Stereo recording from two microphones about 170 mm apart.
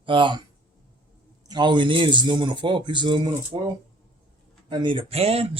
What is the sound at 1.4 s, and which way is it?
Speech, 25° right (ahead or behind).